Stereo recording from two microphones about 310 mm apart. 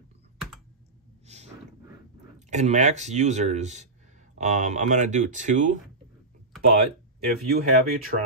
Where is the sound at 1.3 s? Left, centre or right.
Right.